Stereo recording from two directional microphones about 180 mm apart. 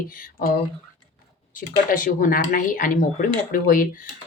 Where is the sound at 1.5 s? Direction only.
50° left (ahead or behind).